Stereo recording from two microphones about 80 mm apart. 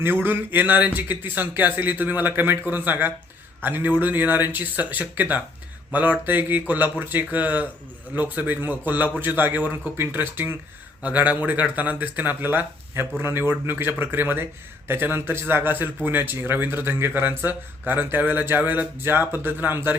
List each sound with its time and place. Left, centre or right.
0.0 s speech: right